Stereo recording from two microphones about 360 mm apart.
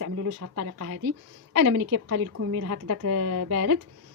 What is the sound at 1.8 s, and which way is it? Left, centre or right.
A woman's voice, right.